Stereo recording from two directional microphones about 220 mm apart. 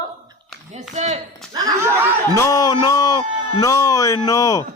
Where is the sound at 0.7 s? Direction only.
30° right (ahead or behind).